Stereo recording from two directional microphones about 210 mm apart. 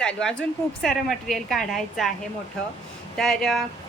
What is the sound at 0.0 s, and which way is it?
A woman's voice, 5° left (ahead or behind).